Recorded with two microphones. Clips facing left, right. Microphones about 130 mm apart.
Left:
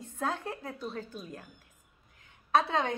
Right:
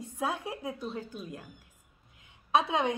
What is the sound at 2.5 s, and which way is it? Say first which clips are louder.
Speech: even; 15° right (ahead or behind).